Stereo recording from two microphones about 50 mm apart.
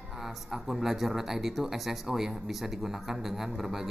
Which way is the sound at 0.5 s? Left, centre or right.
Centre.